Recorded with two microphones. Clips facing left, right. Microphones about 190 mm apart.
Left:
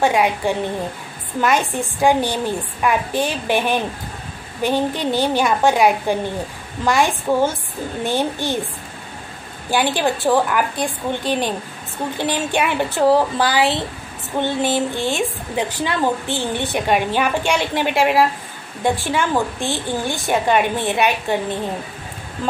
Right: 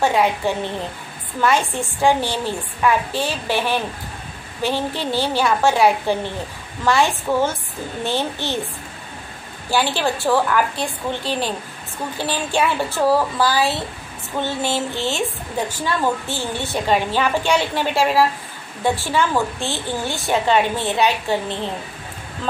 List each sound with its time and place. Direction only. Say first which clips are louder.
0.0 s a woman's voice: left 1 dB; 15° left (ahead or behind)
1.4 s a woman's voice: even; 15° left (ahead or behind)
9.7 s a woman's voice: left 2 dB; 15° left (ahead or behind)